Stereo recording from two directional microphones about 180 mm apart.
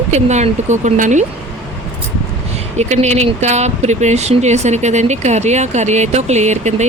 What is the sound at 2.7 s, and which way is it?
Speech, 40° right (ahead or behind).